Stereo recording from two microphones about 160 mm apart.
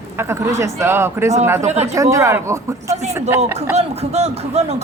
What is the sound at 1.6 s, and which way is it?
Speech, 45° right (ahead or behind).